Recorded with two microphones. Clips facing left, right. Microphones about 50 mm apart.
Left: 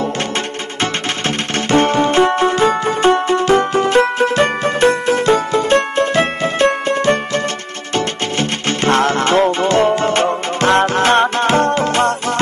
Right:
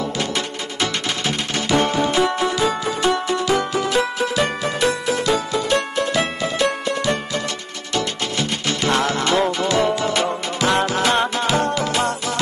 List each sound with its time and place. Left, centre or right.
0.7 s music: left